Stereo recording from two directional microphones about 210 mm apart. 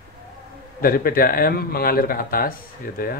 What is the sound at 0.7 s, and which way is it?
Speech, 45° left (ahead or behind).